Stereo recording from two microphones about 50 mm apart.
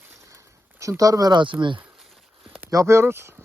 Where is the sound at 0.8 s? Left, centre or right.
Right.